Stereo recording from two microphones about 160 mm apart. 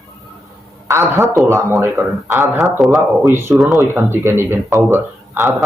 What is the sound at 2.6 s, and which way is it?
Speech, centre (ahead or behind).